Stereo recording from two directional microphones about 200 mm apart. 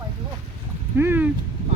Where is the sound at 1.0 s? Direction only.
10° right (ahead or behind).